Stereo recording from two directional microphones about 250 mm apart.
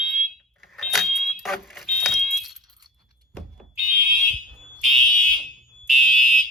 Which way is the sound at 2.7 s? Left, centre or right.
Centre.